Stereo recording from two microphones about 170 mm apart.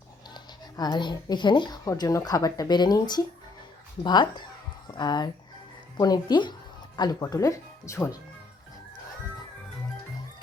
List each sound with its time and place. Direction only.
0.3 s speech: 25° left (ahead or behind)